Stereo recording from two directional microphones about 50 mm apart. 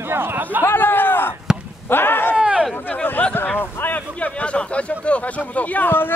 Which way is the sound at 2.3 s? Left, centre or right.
Right.